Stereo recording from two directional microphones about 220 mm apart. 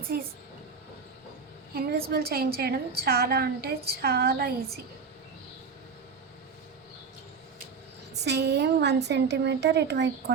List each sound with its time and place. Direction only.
1.7 s a woman's voice: 45° right (ahead or behind)
8.2 s a woman's voice: 50° right (ahead or behind)